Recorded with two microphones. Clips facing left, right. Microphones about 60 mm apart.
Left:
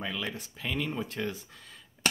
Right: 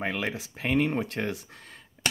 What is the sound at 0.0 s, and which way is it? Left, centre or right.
Speech, right.